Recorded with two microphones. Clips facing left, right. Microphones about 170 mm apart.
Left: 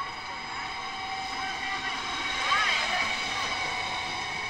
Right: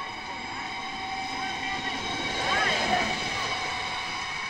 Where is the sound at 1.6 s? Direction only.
25° right (ahead or behind); by 3.1 s 45° right (ahead or behind).